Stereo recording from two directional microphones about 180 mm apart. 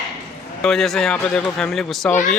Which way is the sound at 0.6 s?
Centre (ahead or behind).